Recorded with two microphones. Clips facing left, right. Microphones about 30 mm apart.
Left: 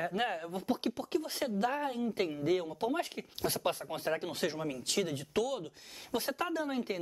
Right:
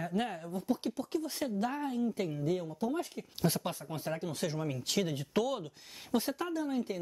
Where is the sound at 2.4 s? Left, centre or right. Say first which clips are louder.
Left 2 dB; left.